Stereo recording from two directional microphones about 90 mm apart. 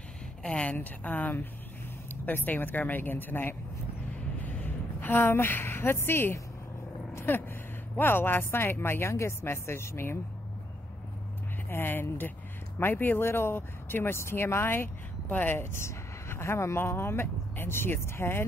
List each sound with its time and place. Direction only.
0.4 s a woman's voice: 10° left (ahead or behind); by 10.1 s 30° left (ahead or behind)
11.7 s speech: 25° left (ahead or behind)